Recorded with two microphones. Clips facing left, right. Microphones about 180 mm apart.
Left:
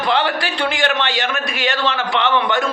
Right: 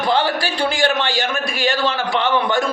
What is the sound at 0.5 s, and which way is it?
Speech, 35° right (ahead or behind).